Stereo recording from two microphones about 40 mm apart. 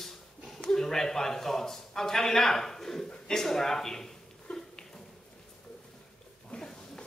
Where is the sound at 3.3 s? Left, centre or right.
Centre.